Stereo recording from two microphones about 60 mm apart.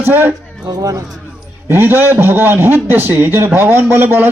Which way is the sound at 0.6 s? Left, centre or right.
Right.